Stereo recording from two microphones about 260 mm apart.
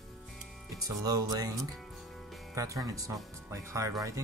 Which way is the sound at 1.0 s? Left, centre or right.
Centre.